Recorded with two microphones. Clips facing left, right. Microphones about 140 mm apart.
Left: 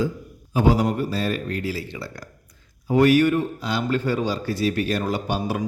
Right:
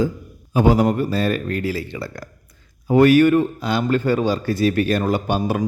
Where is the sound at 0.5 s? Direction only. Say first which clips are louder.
Right 4 dB; 55° right (ahead or behind).